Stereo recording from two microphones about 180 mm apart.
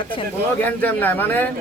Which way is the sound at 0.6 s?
10° left (ahead or behind).